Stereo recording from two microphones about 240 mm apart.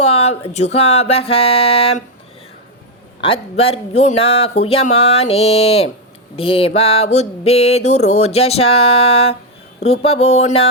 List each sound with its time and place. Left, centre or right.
0.0 s mantra: left
3.2 s mantra: left